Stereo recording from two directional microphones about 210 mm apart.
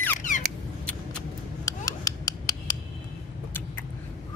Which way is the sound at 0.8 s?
5° left (ahead or behind).